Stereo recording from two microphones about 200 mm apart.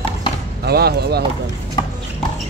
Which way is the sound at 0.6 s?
50° right (ahead or behind).